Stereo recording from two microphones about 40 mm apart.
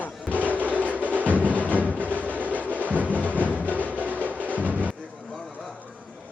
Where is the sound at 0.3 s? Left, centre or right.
Right.